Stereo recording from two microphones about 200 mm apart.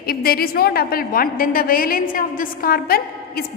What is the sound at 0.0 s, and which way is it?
A woman's voice, 50° left (ahead or behind).